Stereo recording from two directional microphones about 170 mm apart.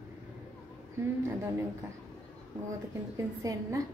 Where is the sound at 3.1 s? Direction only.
20° right (ahead or behind).